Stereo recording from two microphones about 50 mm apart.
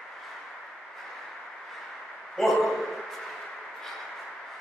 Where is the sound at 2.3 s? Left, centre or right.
Centre.